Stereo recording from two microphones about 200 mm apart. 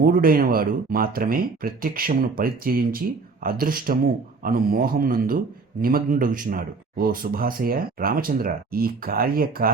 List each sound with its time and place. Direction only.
0.0 s speech: 45° right (ahead or behind)